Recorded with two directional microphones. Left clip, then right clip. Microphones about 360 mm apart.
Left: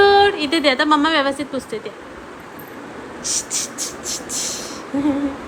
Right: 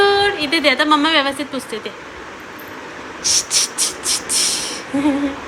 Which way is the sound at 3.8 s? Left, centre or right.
Centre.